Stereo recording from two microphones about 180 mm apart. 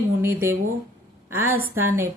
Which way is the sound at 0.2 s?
10° right (ahead or behind).